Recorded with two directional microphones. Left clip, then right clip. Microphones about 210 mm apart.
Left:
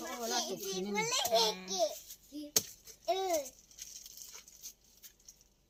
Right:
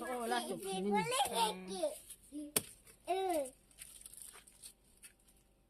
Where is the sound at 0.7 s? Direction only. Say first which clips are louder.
Right 1 dB; 50° right (ahead or behind).